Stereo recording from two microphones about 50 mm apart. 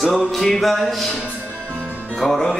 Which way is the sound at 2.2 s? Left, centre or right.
Centre.